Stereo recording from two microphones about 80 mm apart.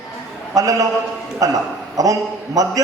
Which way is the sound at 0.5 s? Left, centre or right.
Right.